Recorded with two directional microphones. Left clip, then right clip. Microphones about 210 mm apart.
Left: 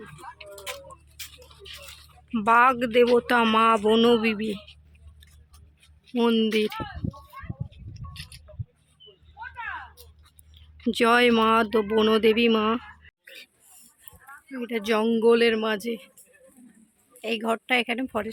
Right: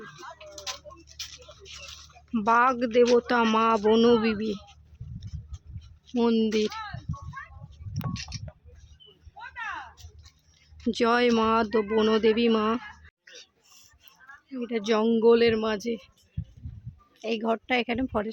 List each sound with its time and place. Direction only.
0.3 s a sound: 40° right (ahead or behind)
2.3 s speech: 5° right (ahead or behind)
6.1 s speech: centre (ahead or behind)
10.9 s speech: centre (ahead or behind)
13.2 s a sound: 40° right (ahead or behind)
14.7 s speech: 5° right (ahead or behind)
17.2 s speech: 5° right (ahead or behind)